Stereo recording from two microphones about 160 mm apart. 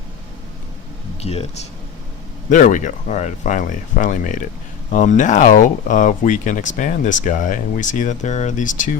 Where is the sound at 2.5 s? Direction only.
50° left (ahead or behind).